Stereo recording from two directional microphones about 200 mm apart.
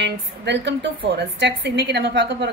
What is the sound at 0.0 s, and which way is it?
A woman's voice, 60° right (ahead or behind).